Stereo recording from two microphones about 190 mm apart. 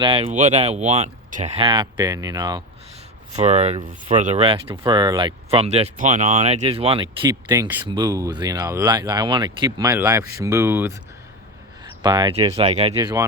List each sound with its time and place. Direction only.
0.0 s speech: 30° right (ahead or behind)
3.3 s speech: 35° right (ahead or behind); by 7.9 s 10° right (ahead or behind)
7.9 s speech: 20° right (ahead or behind)
11.8 s speech: 25° right (ahead or behind)
13.0 s speech: 15° right (ahead or behind)